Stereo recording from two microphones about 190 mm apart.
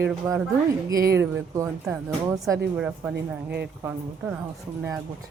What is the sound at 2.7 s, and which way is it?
Speech, 5° right (ahead or behind).